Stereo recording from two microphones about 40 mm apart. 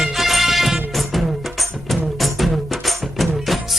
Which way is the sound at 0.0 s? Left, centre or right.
Centre.